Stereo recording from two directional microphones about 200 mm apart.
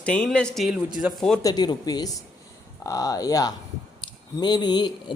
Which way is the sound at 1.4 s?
20° left (ahead or behind).